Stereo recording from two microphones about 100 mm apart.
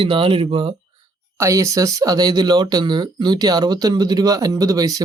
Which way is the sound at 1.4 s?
30° right (ahead or behind).